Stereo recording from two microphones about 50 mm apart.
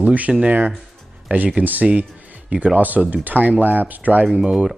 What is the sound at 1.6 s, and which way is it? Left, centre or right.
Speech, right.